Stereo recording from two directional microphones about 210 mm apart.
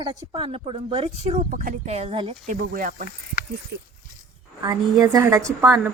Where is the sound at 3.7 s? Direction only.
55° right (ahead or behind).